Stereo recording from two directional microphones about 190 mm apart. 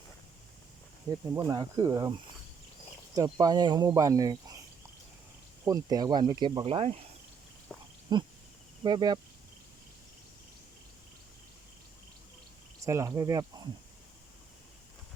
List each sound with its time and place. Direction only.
1.3 s speech: 20° right (ahead or behind)
3.2 s speech: 20° right (ahead or behind)
5.6 s speech: 20° right (ahead or behind)
7.7 s a sound: 5° left (ahead or behind)
8.1 s speech: 20° right (ahead or behind)
12.8 s speech: 15° right (ahead or behind)